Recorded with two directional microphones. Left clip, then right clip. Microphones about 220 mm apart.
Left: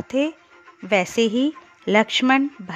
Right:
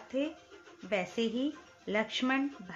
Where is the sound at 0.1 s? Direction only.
50° left (ahead or behind).